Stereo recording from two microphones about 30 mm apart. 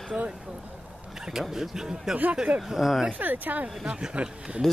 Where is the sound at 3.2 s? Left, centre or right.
Right.